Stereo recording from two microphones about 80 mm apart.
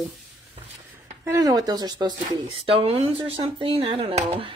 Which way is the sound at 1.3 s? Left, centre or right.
Right.